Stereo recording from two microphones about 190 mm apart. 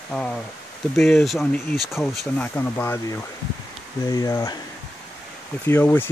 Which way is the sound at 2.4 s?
10° left (ahead or behind).